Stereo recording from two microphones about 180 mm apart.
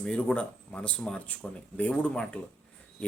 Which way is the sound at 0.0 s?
5° left (ahead or behind).